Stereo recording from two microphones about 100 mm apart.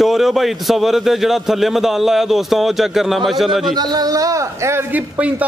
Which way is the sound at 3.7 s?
45° right (ahead or behind).